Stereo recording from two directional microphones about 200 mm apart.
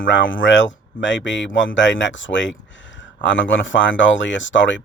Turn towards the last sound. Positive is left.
turn(degrees=65)  # may be behind; listen again after turning